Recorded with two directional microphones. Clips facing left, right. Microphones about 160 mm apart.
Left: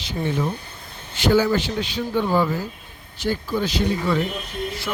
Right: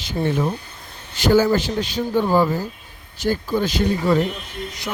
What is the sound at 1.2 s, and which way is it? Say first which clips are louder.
Speech: right 2 dB; 40° right (ahead or behind).